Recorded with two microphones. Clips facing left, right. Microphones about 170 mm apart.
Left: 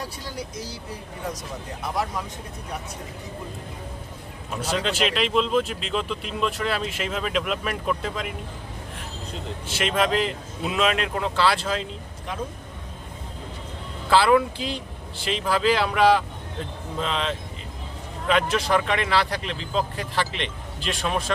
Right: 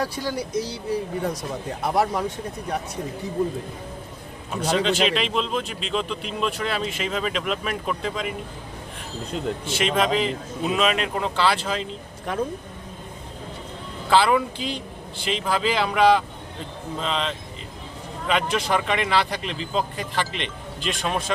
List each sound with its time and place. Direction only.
0.0 s speech: 75° right (ahead or behind)
1.8 s speech: 65° right (ahead or behind)
4.5 s speech: 5° left (ahead or behind)
9.6 s speech: centre (ahead or behind)
14.1 s speech: centre (ahead or behind)